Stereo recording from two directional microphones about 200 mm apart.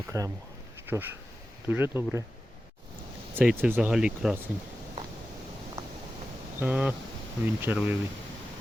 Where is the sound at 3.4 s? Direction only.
10° right (ahead or behind).